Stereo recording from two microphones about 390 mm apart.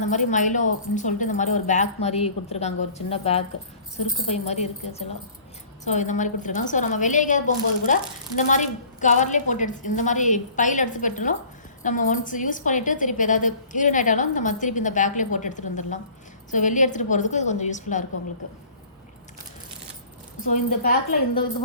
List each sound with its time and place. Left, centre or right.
0.0 s a woman's voice: centre
20.4 s a woman's voice: centre